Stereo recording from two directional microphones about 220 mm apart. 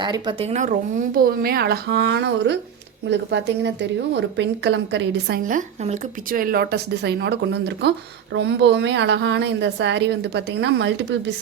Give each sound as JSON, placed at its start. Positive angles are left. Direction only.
{"t": 0.0, "sound": "speech", "side_deg": -20}
{"t": 5.4, "sound": "speech", "side_deg": -35}